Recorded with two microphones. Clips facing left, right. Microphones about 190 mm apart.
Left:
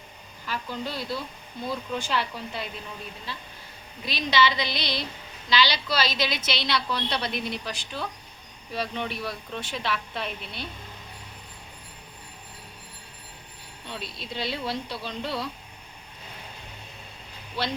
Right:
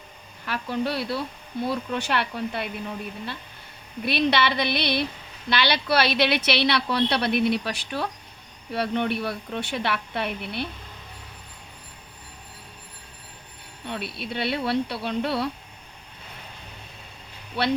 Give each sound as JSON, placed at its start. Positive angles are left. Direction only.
{"t": 0.4, "sound": "a woman's voice", "side_deg": -65}
{"t": 4.0, "sound": "a woman's voice", "side_deg": -60}
{"t": 13.8, "sound": "a woman's voice", "side_deg": -60}
{"t": 17.6, "sound": "a woman's voice", "side_deg": -60}